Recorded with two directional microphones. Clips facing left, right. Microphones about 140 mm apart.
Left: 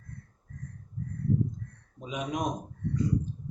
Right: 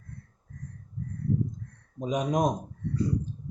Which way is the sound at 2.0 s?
40° right (ahead or behind).